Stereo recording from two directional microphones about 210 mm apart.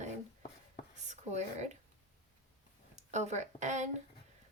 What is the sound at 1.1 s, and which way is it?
Speech, 35° right (ahead or behind).